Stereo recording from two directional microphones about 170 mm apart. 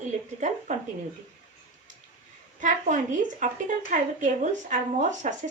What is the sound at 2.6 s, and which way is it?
Speech, 50° right (ahead or behind).